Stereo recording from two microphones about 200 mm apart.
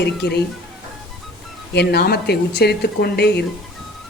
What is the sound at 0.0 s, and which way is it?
Speech, 55° left (ahead or behind).